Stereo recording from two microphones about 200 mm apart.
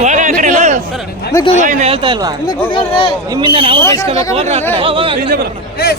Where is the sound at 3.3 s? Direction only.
25° right (ahead or behind).